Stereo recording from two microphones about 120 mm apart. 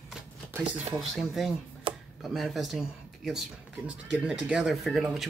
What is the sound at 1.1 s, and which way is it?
Speech, centre (ahead or behind).